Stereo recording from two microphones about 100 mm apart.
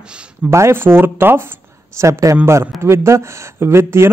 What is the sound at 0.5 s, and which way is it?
A man's voice, 25° right (ahead or behind).